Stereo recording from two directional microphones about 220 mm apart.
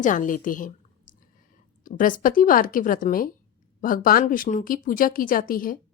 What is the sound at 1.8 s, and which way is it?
A woman's voice, 35° left (ahead or behind).